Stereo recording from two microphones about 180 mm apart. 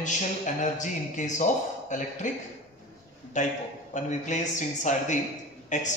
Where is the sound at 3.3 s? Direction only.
40° left (ahead or behind).